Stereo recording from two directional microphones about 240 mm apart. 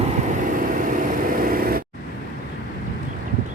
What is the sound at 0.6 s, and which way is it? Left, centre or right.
Vehicle, right.